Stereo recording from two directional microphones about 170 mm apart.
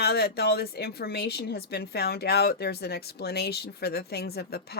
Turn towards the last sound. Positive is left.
turn(degrees=70)  # may be behind; listen again after turning